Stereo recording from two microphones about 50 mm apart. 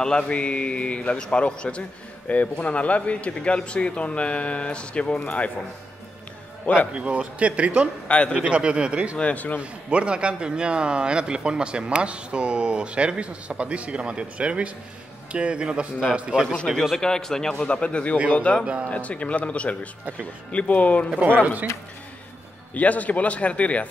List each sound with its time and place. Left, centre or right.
0.0 s a man's voice: centre
6.6 s a man's voice: left
6.9 s a man's voice: right
8.1 s a man's voice: left
8.4 s a man's voice: right
9.2 s a man's voice: left
9.6 s a man's voice: right
17.0 s a man's voice: centre
22.8 s a man's voice: left